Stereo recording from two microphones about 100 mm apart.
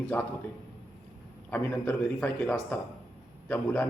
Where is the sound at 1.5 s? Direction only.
20° left (ahead or behind).